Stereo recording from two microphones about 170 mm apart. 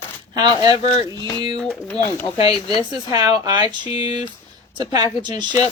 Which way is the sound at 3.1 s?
20° right (ahead or behind).